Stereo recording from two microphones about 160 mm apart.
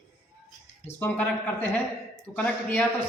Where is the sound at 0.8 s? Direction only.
10° left (ahead or behind).